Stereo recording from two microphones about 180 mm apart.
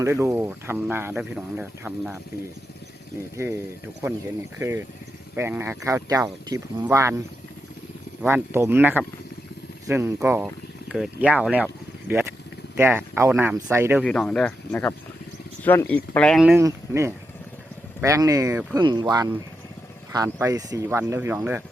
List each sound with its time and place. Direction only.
0.0 s speech: 15° right (ahead or behind)
3.3 s speech: 15° right (ahead or behind)
4.6 s speech: 20° right (ahead or behind)
14.0 s speech: 5° left (ahead or behind)
16.6 s speech: 15° right (ahead or behind)